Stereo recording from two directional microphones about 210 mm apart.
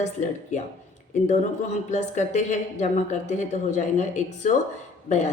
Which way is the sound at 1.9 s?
35° left (ahead or behind).